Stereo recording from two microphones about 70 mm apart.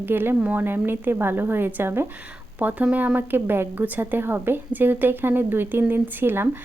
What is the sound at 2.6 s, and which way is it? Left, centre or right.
A woman's voice, right.